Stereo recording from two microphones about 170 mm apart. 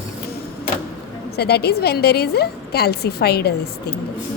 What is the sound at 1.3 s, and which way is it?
A woman's voice, 70° left (ahead or behind).